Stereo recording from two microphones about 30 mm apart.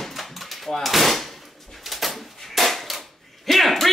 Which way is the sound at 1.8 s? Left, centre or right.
Centre.